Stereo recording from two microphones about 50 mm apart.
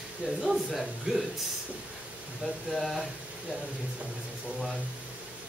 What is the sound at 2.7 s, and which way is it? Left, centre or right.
Speech, centre.